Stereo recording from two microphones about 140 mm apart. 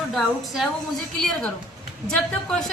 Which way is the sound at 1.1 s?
5° left (ahead or behind).